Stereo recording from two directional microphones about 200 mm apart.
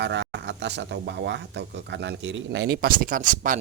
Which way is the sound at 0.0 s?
60° right (ahead or behind).